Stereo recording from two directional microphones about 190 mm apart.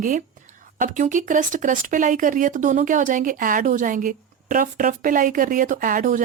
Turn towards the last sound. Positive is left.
turn(degrees=-45)  # may be behind; listen again after turning